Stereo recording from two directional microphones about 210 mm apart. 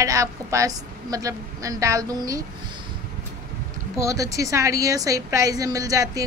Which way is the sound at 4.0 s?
15° right (ahead or behind).